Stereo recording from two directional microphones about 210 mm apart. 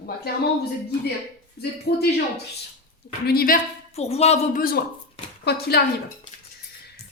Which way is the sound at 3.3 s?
45° left (ahead or behind).